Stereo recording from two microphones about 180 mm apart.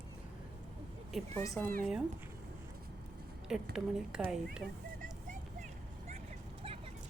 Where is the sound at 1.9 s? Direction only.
5° right (ahead or behind).